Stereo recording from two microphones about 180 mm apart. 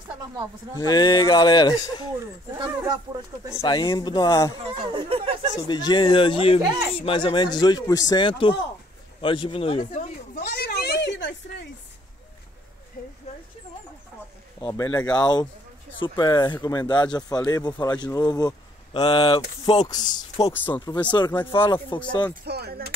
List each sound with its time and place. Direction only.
0.7 s speech: 25° left (ahead or behind)
2.9 s speech: 25° right (ahead or behind)
3.6 s speech: 25° left (ahead or behind)
4.7 s speech: 30° right (ahead or behind)
5.6 s speech: 25° left (ahead or behind)
10.3 s a sound: 65° left (ahead or behind)
14.7 s speech: 20° left (ahead or behind)
18.9 s speech: 30° left (ahead or behind)
20.5 s speech: 10° left (ahead or behind)
20.8 s speech: 25° left (ahead or behind)
21.3 s speech: 15° left (ahead or behind)
21.9 s speech: 25° left (ahead or behind)
22.4 s speech: 65° right (ahead or behind)